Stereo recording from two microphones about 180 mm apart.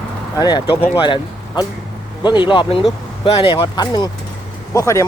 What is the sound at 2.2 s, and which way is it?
Speech, 25° left (ahead or behind).